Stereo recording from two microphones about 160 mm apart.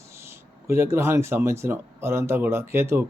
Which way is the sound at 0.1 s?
15° right (ahead or behind).